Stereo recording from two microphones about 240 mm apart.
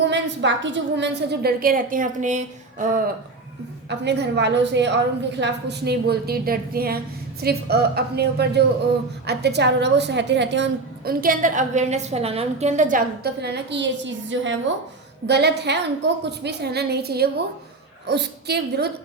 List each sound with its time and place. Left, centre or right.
0.0 s a woman's voice: right
3.8 s a woman's voice: right